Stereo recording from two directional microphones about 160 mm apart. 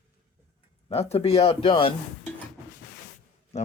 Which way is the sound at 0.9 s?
40° left (ahead or behind).